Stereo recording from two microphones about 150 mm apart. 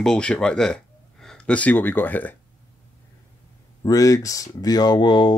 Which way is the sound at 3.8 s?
25° left (ahead or behind).